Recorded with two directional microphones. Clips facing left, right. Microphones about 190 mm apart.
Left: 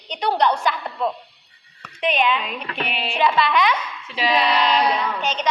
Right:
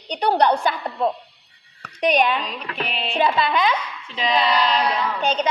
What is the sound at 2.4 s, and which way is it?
Music, 5° left (ahead or behind).